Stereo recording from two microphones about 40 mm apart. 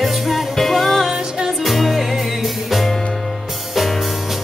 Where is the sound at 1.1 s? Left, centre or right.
Centre.